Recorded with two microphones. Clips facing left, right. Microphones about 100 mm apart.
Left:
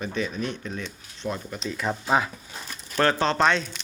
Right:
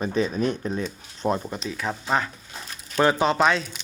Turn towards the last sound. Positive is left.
turn(degrees=-5)  # may be behind; listen again after turning